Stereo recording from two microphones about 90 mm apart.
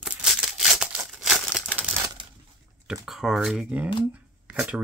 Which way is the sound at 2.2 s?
70° right (ahead or behind).